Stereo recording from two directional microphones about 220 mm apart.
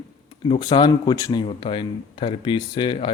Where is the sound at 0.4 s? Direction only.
20° left (ahead or behind).